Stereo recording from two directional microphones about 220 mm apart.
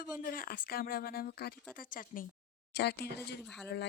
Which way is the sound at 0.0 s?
40° left (ahead or behind).